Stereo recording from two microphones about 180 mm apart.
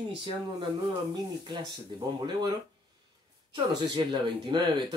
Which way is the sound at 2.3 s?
25° right (ahead or behind).